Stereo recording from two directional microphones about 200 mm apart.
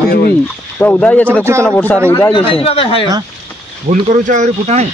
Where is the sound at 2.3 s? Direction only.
30° left (ahead or behind).